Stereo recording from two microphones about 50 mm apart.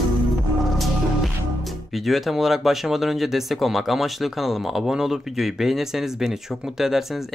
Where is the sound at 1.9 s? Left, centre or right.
Centre.